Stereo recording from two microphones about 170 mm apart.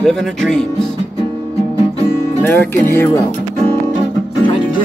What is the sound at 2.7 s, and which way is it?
Speech, 15° left (ahead or behind).